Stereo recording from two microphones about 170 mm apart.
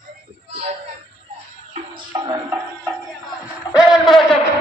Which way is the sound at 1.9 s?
25° right (ahead or behind).